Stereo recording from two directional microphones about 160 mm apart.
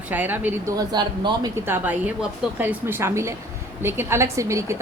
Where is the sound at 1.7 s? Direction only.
10° right (ahead or behind).